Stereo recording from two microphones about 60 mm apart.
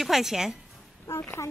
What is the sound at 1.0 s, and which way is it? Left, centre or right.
Speech, left.